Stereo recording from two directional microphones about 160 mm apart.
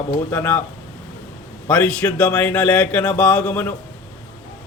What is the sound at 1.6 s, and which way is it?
Speech, 10° left (ahead or behind).